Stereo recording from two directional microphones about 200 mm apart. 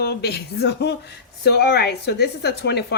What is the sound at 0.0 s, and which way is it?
Speech, 55° left (ahead or behind).